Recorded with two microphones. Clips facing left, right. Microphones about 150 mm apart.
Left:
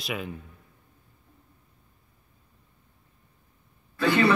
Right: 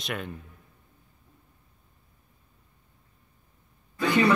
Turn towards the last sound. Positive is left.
turn(degrees=-15)  # may be behind; listen again after turning